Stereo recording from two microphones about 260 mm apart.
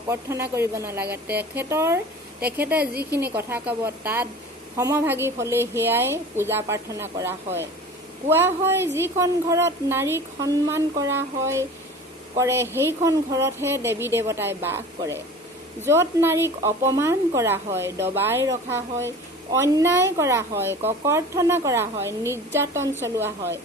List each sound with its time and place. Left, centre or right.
0.1 s speech: centre
2.8 s a woman's voice: right
3.3 s speech: centre